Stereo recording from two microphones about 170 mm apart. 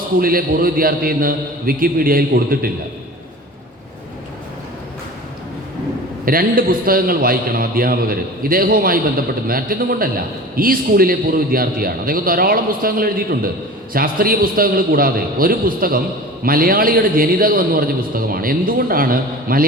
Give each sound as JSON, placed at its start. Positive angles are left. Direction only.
{"t": 0.2, "sound": "a man's voice", "side_deg": -60}
{"t": 6.2, "sound": "a man's voice", "side_deg": -60}